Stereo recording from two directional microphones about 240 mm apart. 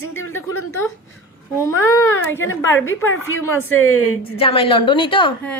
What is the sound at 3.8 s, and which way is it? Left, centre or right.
Speech, left.